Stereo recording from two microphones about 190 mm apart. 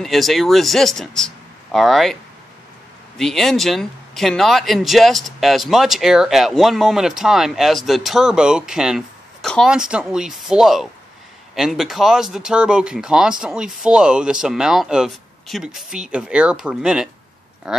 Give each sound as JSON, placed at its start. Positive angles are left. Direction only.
{"t": 0.0, "sound": "speech", "side_deg": 0}
{"t": 3.2, "sound": "speech", "side_deg": 0}